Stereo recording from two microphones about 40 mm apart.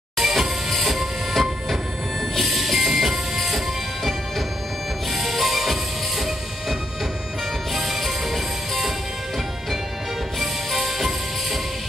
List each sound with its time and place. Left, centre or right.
0.2 s music: centre
5.1 s music: centre
10.4 s music: centre